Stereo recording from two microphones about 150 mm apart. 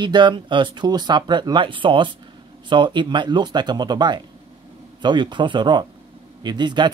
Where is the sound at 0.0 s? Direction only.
30° right (ahead or behind).